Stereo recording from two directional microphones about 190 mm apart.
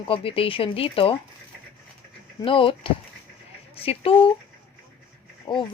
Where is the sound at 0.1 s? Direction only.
30° left (ahead or behind).